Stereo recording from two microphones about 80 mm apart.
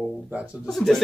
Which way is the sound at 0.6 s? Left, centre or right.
Centre.